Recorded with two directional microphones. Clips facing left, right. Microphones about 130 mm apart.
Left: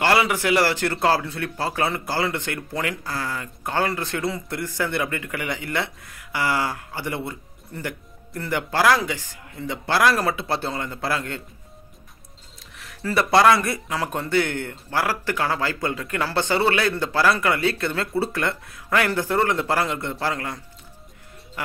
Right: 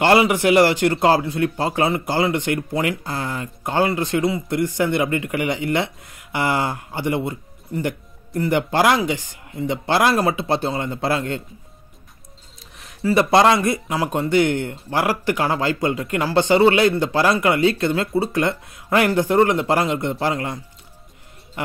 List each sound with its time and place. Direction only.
0.0 s speech: 20° right (ahead or behind)
13.1 s speech: 20° right (ahead or behind)